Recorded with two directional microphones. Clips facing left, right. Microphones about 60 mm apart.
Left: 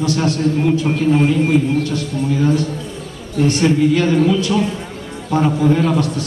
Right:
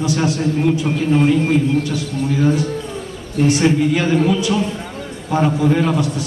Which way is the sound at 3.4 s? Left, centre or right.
Centre.